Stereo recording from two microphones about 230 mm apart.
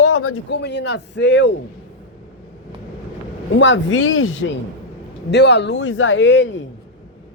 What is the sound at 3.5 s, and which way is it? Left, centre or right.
Speech, left.